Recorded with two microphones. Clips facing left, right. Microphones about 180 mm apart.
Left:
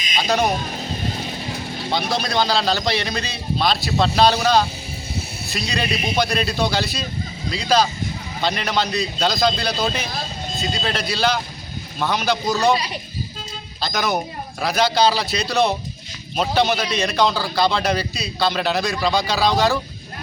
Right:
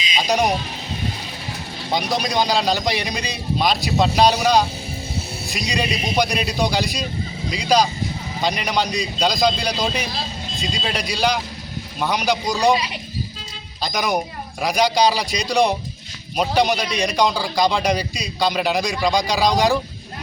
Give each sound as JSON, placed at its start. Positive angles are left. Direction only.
{"t": 1.9, "sound": "a man's voice", "side_deg": -15}
{"t": 13.8, "sound": "a man's voice", "side_deg": -15}